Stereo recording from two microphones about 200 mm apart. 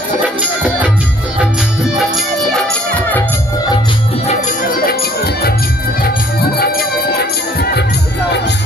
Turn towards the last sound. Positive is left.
turn(degrees=50)  # may be behind; listen again after turning